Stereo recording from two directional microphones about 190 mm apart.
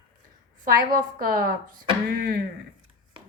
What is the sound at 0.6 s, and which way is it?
A woman's voice, 50° right (ahead or behind).